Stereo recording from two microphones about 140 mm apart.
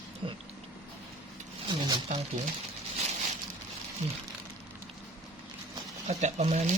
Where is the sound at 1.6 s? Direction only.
35° right (ahead or behind).